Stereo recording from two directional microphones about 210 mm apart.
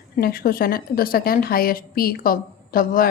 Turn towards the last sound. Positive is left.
turn(degrees=45)  # may be behind; listen again after turning